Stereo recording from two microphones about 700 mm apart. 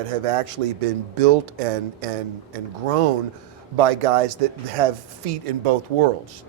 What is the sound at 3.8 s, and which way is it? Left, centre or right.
Speech, right.